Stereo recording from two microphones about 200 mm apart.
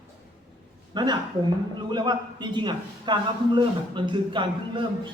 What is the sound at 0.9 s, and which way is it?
Speech, 20° right (ahead or behind).